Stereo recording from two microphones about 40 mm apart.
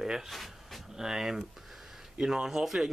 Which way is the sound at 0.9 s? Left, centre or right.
Centre.